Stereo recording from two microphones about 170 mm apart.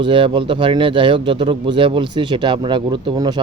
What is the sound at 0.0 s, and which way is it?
Speech, 30° right (ahead or behind).